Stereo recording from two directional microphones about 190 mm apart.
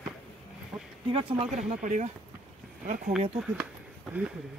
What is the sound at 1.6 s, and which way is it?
Speech, 40° right (ahead or behind).